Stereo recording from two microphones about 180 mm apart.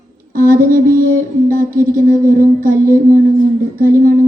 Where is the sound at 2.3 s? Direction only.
50° right (ahead or behind).